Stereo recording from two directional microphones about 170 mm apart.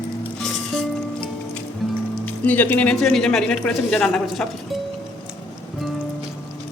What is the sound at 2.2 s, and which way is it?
Speech, 10° left (ahead or behind).